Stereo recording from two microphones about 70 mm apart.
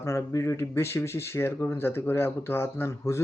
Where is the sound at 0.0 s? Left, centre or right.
Left.